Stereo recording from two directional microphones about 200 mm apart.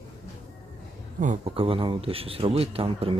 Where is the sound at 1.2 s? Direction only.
35° right (ahead or behind).